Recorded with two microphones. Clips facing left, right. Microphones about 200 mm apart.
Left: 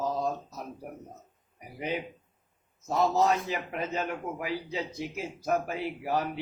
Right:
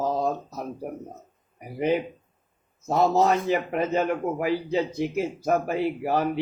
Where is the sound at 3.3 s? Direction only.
55° right (ahead or behind).